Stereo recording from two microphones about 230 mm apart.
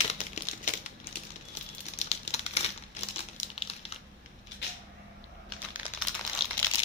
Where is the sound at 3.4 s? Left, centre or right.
Left.